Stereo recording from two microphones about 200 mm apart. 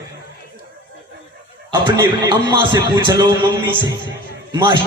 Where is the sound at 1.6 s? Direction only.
20° right (ahead or behind).